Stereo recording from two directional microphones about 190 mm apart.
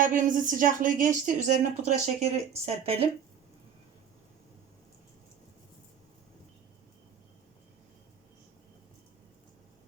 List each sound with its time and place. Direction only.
0.0 s speech: 45° right (ahead or behind)